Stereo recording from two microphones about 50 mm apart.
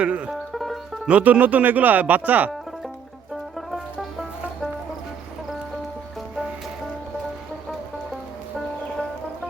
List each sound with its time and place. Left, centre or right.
0.0 s speech: right
0.3 s banjo: centre
1.0 s speech: right